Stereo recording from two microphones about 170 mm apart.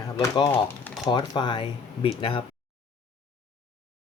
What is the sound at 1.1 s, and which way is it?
Speech, 25° left (ahead or behind).